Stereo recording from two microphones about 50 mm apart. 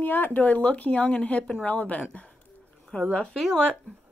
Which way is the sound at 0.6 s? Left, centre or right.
Left.